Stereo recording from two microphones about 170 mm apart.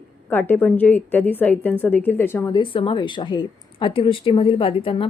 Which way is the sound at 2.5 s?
30° left (ahead or behind).